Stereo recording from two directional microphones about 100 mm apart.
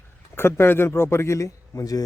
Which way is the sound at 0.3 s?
25° left (ahead or behind).